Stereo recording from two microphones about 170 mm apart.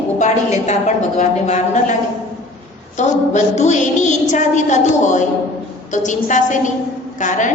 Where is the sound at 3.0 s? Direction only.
45° left (ahead or behind).